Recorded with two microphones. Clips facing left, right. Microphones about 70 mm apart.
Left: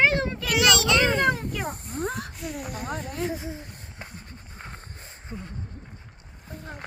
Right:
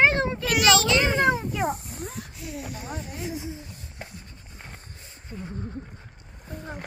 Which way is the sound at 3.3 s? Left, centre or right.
Left.